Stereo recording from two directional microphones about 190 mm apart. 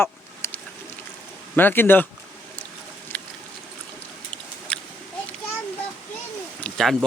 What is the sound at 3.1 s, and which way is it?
Boat, 10° left (ahead or behind).